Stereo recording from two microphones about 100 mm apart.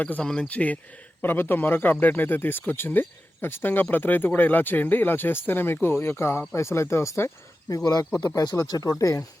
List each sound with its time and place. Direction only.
0.0 s speech: 15° left (ahead or behind); by 9.2 s 35° left (ahead or behind)